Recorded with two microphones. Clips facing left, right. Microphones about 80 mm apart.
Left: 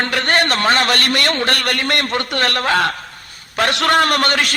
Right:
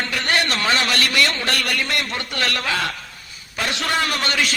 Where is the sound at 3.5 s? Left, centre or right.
Left.